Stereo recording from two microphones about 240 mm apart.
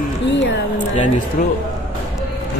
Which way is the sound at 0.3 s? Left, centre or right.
Left.